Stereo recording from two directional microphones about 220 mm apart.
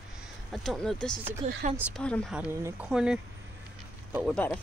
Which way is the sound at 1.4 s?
25° right (ahead or behind).